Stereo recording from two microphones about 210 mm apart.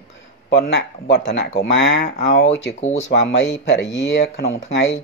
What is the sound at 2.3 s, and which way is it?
Speech, 30° left (ahead or behind).